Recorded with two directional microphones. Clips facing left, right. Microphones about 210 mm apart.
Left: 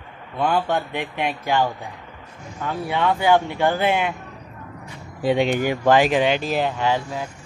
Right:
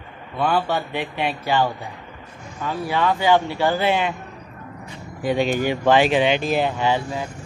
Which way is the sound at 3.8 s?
10° left (ahead or behind).